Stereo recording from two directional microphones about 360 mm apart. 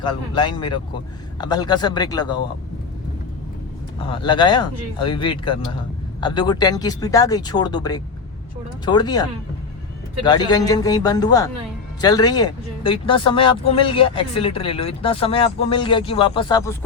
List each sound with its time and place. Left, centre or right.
0.0 s speech: centre
4.0 s speech: centre
10.2 s speech: centre